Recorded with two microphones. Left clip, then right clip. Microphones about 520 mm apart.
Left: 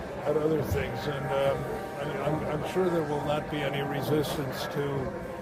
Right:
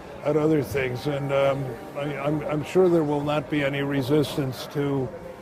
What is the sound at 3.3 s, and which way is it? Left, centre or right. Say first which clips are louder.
Speech: right 5 dB; right.